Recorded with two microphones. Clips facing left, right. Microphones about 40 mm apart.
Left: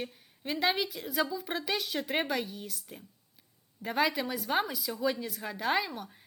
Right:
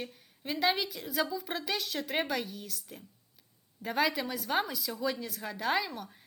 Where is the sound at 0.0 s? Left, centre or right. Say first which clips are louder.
Left 2 dB; centre.